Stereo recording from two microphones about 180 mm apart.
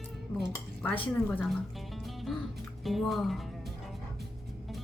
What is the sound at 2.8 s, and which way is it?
Speech, centre (ahead or behind).